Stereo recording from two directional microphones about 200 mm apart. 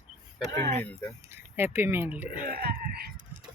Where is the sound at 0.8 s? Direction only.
5° left (ahead or behind).